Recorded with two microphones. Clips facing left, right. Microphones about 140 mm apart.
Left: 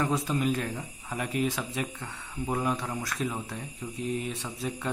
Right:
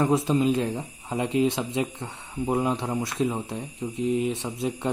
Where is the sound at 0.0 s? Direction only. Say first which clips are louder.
Right 6 dB; 25° right (ahead or behind).